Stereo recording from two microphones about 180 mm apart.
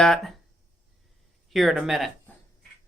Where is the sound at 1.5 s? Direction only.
Centre (ahead or behind).